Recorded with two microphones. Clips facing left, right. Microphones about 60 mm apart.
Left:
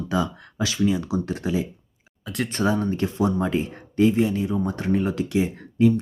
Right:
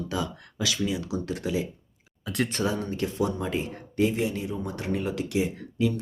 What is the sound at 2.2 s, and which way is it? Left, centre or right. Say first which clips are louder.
Speech: even; centre.